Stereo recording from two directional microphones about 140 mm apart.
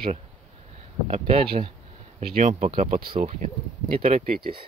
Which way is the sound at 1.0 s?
50° right (ahead or behind).